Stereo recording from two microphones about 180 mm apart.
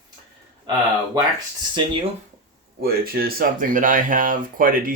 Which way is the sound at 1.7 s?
30° right (ahead or behind).